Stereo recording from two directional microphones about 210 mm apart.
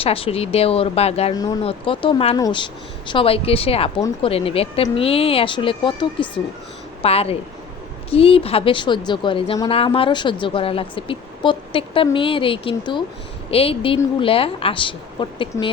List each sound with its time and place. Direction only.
0.0 s a woman's voice: 25° left (ahead or behind)